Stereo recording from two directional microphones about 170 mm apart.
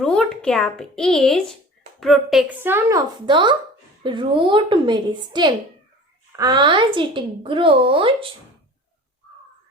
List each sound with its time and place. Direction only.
0.0 s a woman's voice: 5° left (ahead or behind); by 8.3 s 30° right (ahead or behind)